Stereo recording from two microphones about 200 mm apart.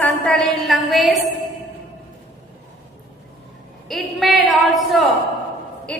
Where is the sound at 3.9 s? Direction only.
Centre (ahead or behind).